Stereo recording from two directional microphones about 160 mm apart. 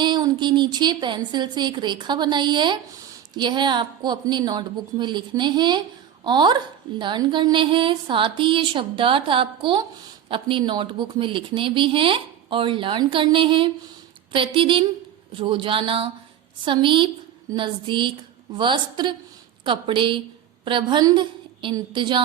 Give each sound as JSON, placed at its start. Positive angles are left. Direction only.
{"t": 0.0, "sound": "a woman's voice", "side_deg": -30}